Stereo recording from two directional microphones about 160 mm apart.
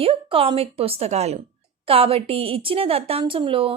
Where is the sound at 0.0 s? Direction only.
35° right (ahead or behind).